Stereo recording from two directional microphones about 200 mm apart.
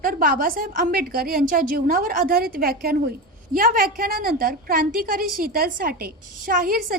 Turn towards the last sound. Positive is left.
turn(degrees=-45)  # may be behind; listen again after turning